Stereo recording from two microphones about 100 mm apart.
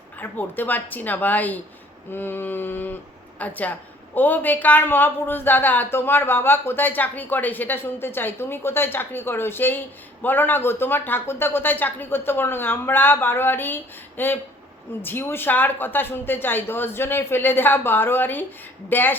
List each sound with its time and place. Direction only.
0.2 s a woman's voice: 20° left (ahead or behind)